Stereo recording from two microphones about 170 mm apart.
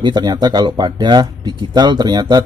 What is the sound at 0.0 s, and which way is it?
Speech, 25° right (ahead or behind).